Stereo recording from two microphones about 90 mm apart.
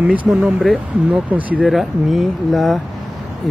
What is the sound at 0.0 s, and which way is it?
Speech, 15° right (ahead or behind).